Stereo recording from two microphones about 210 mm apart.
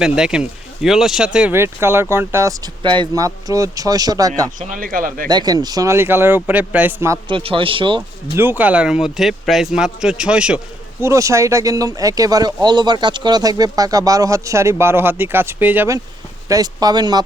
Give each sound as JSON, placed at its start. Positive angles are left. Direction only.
{"t": 0.0, "sound": "speech", "side_deg": -5}
{"t": 4.7, "sound": "speech", "side_deg": -40}
{"t": 5.3, "sound": "speech", "side_deg": -20}
{"t": 7.3, "sound": "speech", "side_deg": -25}
{"t": 8.4, "sound": "speech", "side_deg": -10}